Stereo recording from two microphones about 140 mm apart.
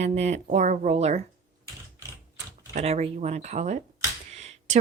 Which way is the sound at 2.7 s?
50° right (ahead or behind).